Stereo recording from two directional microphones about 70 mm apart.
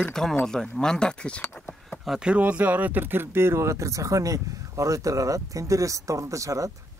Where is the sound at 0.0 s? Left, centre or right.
Centre.